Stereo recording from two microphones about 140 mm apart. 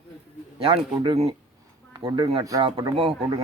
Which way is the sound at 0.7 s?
40° right (ahead or behind).